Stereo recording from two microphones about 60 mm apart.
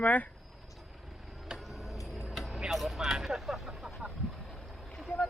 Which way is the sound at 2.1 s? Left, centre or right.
Centre.